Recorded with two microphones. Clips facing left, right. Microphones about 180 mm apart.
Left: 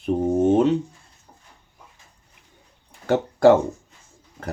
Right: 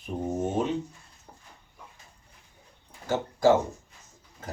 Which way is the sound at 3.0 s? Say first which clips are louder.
Left 7 dB; 65° left (ahead or behind).